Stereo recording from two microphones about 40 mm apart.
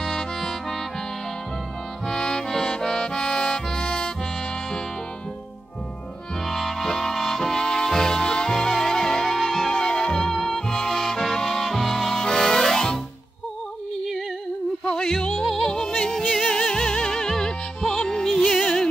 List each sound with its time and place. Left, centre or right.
0.0 s music: centre
2.0 s music: centre
6.4 s music: centre
14.9 s music: centre
15.4 s music: centre